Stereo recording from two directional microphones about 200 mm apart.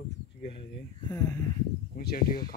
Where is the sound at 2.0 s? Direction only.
50° left (ahead or behind).